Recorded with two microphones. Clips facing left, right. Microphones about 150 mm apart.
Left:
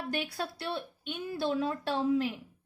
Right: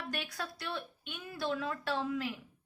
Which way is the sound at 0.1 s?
30° left (ahead or behind).